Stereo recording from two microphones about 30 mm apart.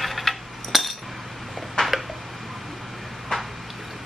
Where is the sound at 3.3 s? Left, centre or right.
Left.